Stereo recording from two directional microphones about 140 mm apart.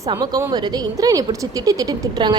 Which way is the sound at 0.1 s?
25° right (ahead or behind).